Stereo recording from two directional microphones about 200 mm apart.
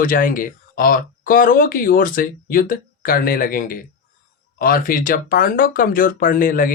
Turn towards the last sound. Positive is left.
turn(degrees=45)  # may be behind; listen again after turning